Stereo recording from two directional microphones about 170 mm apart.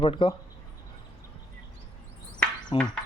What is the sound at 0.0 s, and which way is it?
Speech, 30° left (ahead or behind).